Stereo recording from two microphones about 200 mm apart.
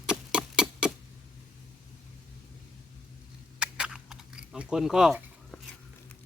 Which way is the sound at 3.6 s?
5° right (ahead or behind).